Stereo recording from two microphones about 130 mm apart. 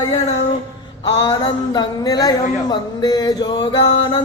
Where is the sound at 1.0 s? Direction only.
35° left (ahead or behind).